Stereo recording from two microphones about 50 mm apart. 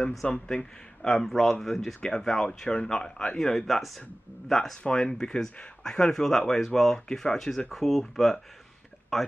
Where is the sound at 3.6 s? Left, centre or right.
Centre.